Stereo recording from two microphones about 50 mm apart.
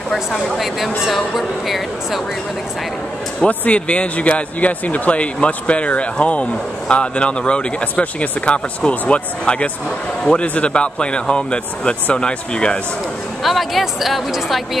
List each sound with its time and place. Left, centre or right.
0.6 s speech: centre
3.4 s a man's voice: left
13.4 s speech: centre